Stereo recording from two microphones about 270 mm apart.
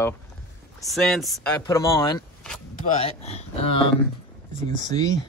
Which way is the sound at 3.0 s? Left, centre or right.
Left.